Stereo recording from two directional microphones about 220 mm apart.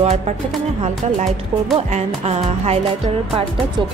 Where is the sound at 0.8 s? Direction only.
30° right (ahead or behind).